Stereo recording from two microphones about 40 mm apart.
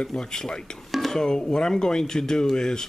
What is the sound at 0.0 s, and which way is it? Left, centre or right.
Speech, centre.